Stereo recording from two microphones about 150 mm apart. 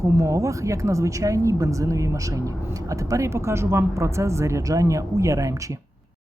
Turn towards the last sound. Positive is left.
turn(degrees=-20)  # may be behind; listen again after turning